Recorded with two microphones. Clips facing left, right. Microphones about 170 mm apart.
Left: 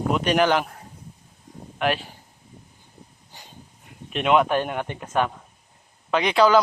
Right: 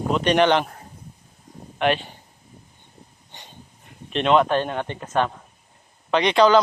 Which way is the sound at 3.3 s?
Centre (ahead or behind).